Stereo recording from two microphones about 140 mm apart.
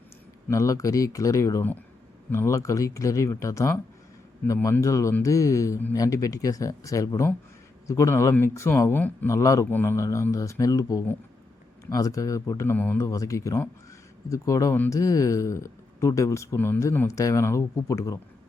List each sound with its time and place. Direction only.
0.4 s speech: 20° left (ahead or behind)